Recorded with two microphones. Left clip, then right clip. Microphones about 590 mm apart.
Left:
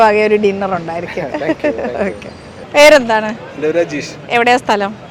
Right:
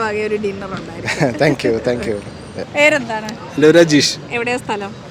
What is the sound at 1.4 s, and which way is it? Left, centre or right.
Speech, right.